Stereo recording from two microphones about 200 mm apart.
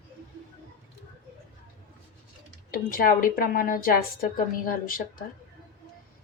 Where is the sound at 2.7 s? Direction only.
45° left (ahead or behind).